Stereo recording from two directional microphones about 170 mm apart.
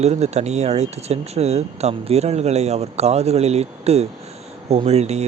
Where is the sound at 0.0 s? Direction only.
40° right (ahead or behind).